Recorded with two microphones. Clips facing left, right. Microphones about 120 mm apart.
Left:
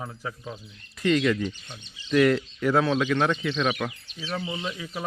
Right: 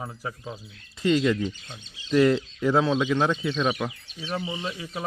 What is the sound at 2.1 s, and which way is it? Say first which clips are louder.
Speech: right 1 dB; 30° right (ahead or behind).